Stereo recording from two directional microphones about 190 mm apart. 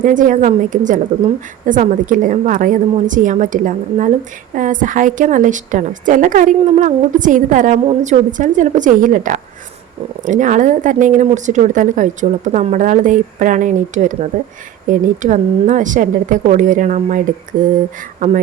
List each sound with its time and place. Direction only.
0.0 s a woman's voice: 45° right (ahead or behind)